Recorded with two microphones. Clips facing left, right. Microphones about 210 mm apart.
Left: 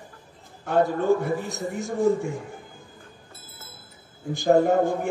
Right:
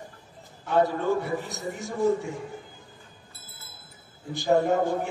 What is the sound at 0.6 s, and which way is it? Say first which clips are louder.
A man's voice: left 2 dB; 50° left (ahead or behind).